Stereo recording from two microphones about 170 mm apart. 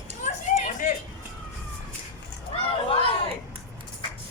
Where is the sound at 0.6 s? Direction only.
50° left (ahead or behind).